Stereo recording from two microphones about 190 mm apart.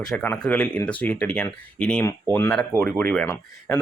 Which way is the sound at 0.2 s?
5° left (ahead or behind).